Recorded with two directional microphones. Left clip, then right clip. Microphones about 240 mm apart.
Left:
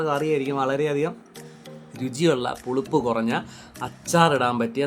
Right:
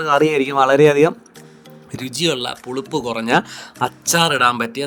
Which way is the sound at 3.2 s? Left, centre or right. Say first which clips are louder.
Right 10 dB; right.